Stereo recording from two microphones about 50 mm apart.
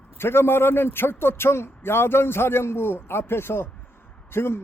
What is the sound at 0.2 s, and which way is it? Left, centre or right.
A man's voice, left.